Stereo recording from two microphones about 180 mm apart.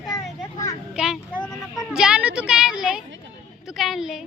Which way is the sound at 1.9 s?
5° right (ahead or behind).